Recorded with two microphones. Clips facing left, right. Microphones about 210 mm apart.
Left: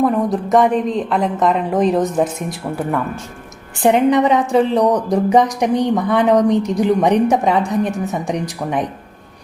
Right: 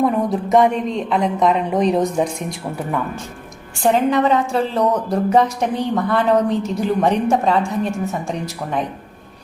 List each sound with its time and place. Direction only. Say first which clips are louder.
0.0 s a woman's voice: left 2 dB; centre (ahead or behind)
4.1 s a woman's voice: left 3 dB; 15° left (ahead or behind)